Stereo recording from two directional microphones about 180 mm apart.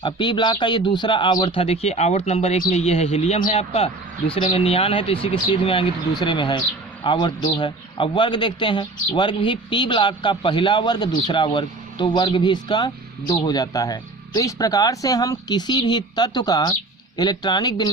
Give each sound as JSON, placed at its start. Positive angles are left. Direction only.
{"t": 0.0, "sound": "speech", "side_deg": 25}